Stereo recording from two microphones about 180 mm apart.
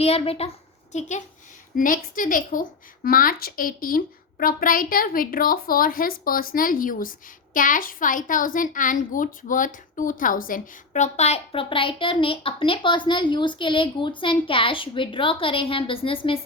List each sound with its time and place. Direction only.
0.0 s a child's voice: 35° left (ahead or behind)